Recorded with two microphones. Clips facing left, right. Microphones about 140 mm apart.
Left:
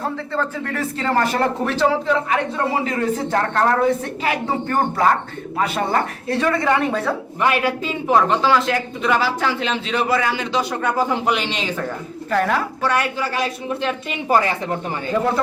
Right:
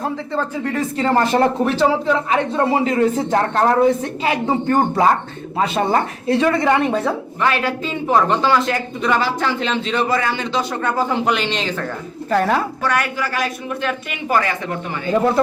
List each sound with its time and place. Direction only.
0.0 s a woman's voice: 15° right (ahead or behind)
7.4 s a man's voice: 10° left (ahead or behind)
12.3 s a woman's voice: 30° right (ahead or behind)
12.8 s speech: 25° left (ahead or behind)